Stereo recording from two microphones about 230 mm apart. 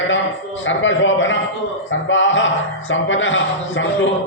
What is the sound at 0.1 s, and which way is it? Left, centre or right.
A man's voice, left.